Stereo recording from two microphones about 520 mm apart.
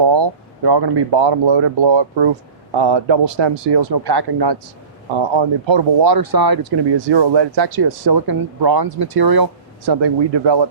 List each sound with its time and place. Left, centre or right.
0.0 s speech: right
5.1 s speech: right